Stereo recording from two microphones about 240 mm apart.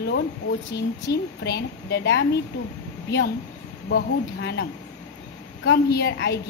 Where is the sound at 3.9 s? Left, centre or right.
Left.